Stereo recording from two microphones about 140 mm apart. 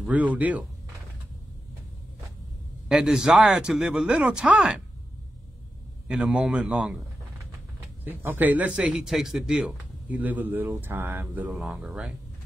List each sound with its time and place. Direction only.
0.0 s speech: 10° right (ahead or behind)
2.9 s speech: 5° right (ahead or behind)
6.0 s speech: 5° right (ahead or behind)
8.0 s speech: 15° right (ahead or behind)